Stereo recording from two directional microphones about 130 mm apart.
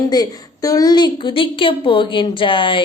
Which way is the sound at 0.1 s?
30° left (ahead or behind).